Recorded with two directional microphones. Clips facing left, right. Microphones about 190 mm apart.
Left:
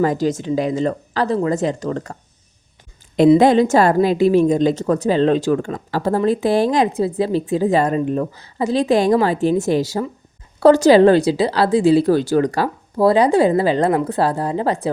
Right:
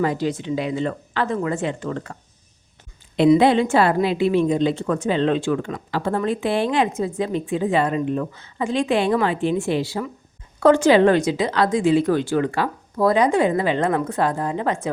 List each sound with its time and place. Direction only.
0.0 s a woman's voice: 45° left (ahead or behind)
3.3 s a woman's voice: 40° left (ahead or behind)